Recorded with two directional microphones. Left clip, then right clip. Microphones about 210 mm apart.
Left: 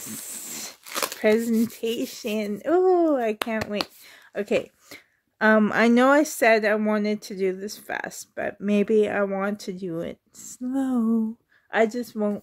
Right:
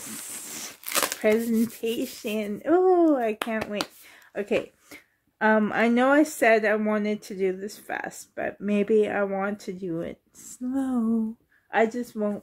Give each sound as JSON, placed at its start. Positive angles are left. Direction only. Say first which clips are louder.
{"t": 1.2, "sound": "speech", "louder": "left 4 dB", "side_deg": 50}
{"t": 4.3, "sound": "speech", "louder": "left 2 dB", "side_deg": 50}
{"t": 10.6, "sound": "female singing", "louder": "left 2 dB", "side_deg": 40}
{"t": 11.7, "sound": "speech", "louder": "left 1 dB", "side_deg": 55}